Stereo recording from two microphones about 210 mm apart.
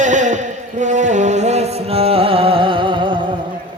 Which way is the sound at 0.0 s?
35° right (ahead or behind).